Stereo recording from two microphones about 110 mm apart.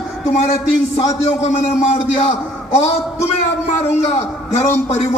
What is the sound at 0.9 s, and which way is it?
A man's voice, 80° left.